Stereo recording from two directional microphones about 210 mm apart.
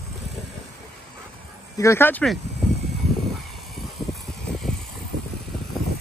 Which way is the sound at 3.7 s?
Centre (ahead or behind).